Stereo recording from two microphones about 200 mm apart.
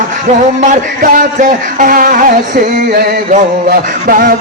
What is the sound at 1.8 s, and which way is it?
Music, 45° right (ahead or behind).